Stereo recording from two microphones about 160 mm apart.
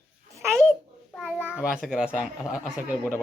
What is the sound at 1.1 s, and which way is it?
A child's voice, 5° right (ahead or behind).